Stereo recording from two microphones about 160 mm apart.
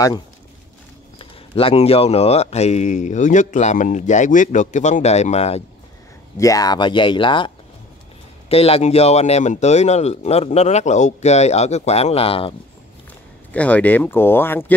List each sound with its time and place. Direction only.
1.1 s speech: 35° left (ahead or behind)
6.3 s speech: 20° left (ahead or behind); by 12.5 s 35° left (ahead or behind)
13.5 s speech: 10° left (ahead or behind)